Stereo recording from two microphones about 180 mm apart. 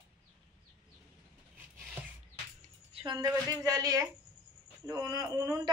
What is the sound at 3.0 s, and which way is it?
Speech, 20° right (ahead or behind).